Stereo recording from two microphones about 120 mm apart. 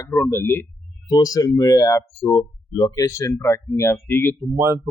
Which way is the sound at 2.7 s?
30° left (ahead or behind).